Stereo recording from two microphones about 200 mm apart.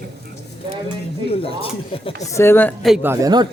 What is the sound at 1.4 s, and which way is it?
Speech, 25° left (ahead or behind).